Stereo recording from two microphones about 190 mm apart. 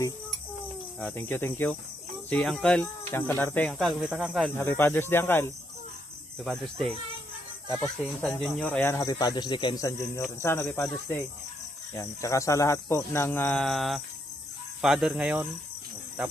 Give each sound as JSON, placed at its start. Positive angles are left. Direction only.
{"t": 0.9, "sound": "speech", "side_deg": 10}
{"t": 3.7, "sound": "speech", "side_deg": 0}
{"t": 4.6, "sound": "speech", "side_deg": 10}
{"t": 6.4, "sound": "speech", "side_deg": 0}
{"t": 7.6, "sound": "speech", "side_deg": -20}
{"t": 8.2, "sound": "speech", "side_deg": 5}